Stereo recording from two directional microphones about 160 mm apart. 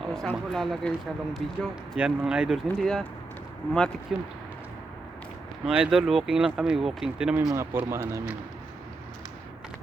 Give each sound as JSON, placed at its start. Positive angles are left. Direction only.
{"t": 0.0, "sound": "a sound", "side_deg": 0}
{"t": 0.3, "sound": "speech", "side_deg": 5}
{"t": 2.6, "sound": "speech", "side_deg": 5}
{"t": 4.1, "sound": "speech", "side_deg": 0}
{"t": 5.6, "sound": "speech", "side_deg": -5}